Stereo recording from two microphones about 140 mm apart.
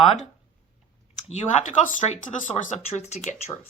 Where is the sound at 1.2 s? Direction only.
55° left (ahead or behind).